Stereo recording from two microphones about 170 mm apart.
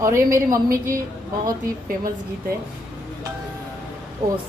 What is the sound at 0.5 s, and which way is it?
Female singing, 20° right (ahead or behind).